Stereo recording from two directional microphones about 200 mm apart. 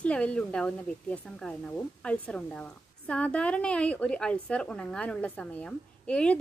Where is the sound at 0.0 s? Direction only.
5° left (ahead or behind).